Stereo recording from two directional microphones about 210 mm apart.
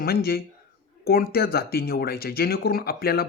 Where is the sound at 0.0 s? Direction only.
45° left (ahead or behind).